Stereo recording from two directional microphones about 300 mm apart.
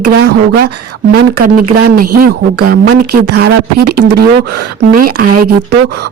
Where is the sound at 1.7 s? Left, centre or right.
Right.